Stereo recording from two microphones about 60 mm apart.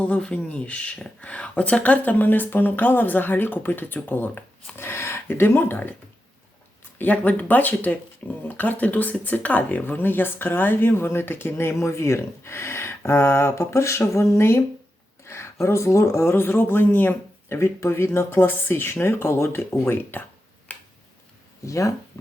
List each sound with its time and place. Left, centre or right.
0.0 s speech: centre
4.8 s speech: left
7.0 s speech: left
17.5 s speech: left
21.6 s speech: left